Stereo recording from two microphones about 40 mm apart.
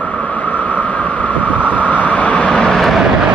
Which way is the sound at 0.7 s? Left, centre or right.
Left.